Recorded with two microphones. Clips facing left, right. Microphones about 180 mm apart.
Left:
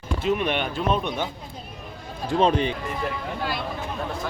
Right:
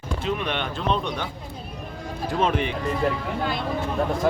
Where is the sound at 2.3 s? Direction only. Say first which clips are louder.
Left 3 dB; 30° left (ahead or behind).